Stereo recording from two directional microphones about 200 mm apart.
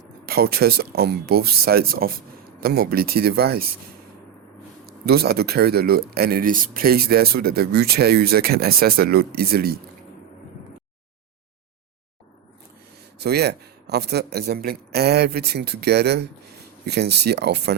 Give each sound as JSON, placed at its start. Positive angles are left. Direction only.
{"t": 0.3, "sound": "speech", "side_deg": -50}
{"t": 4.9, "sound": "speech", "side_deg": -50}
{"t": 13.1, "sound": "speech", "side_deg": -55}